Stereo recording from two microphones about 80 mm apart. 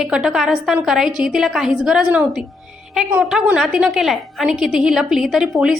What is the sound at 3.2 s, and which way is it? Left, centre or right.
A woman's voice, centre.